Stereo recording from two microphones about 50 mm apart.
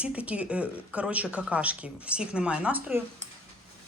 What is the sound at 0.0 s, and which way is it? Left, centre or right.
Speech, right.